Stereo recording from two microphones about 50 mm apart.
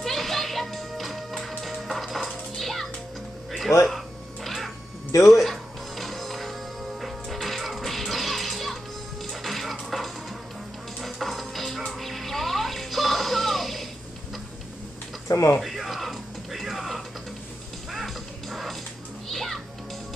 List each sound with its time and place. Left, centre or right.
0.0 s music: centre
3.7 s speech: left
5.3 s music: centre
15.2 s tick-tock: left
15.6 s music: centre